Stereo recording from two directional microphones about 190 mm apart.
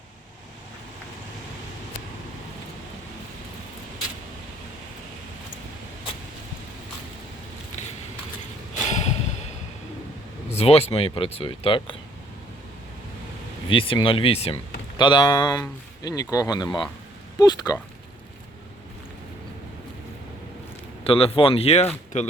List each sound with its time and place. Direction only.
8.8 s a sound: 35° left (ahead or behind)
10.6 s speech: 30° left (ahead or behind)
13.7 s speech: 25° left (ahead or behind)
21.0 s speech: 30° left (ahead or behind)